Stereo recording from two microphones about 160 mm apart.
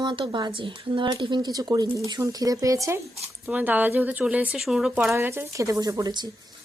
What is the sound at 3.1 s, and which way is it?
Speech, 10° right (ahead or behind).